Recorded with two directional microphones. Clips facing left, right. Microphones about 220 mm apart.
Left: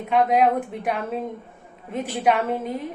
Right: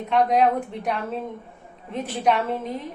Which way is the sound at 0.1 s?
5° left (ahead or behind).